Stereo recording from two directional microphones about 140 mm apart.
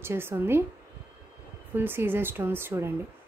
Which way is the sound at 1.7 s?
15° right (ahead or behind).